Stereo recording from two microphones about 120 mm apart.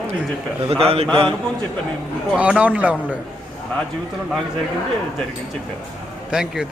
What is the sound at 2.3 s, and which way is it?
Speech, 10° right (ahead or behind).